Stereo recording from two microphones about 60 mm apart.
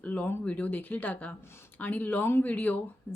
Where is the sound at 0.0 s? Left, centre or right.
Left.